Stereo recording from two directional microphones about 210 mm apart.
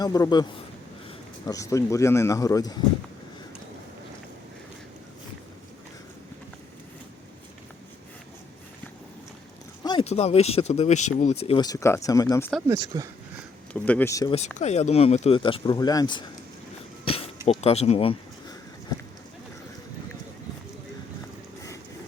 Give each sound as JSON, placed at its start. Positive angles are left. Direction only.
{"t": 0.0, "sound": "speech", "side_deg": 15}
{"t": 1.5, "sound": "speech", "side_deg": 15}
{"t": 9.8, "sound": "speech", "side_deg": 25}
{"t": 12.6, "sound": "speech", "side_deg": -15}
{"t": 13.8, "sound": "speech", "side_deg": 10}
{"t": 14.3, "sound": "speech", "side_deg": 30}
{"t": 17.6, "sound": "speech", "side_deg": 30}